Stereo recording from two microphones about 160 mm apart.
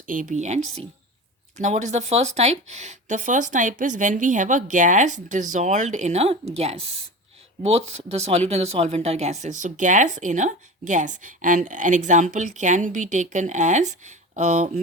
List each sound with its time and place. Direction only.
0.1 s speech: 55° right (ahead or behind)